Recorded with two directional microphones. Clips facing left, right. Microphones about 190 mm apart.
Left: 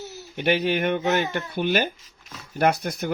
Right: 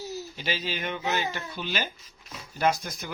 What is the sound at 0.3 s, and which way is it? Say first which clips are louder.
Speech: left 13 dB; 60° left (ahead or behind).